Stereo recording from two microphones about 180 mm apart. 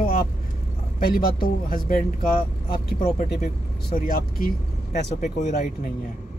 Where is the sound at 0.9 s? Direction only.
55° left (ahead or behind).